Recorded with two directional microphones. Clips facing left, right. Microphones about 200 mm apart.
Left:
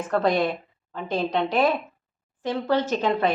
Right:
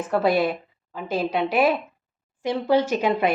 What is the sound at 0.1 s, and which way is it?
Speech, 5° right (ahead or behind).